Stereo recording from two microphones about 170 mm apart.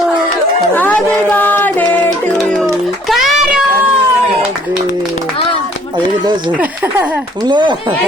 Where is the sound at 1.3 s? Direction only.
10° left (ahead or behind).